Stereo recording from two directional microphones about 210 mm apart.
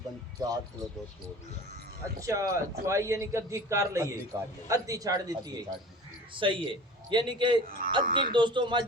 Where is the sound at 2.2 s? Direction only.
15° right (ahead or behind).